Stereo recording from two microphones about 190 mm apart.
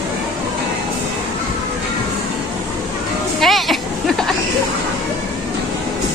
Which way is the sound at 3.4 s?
Centre (ahead or behind).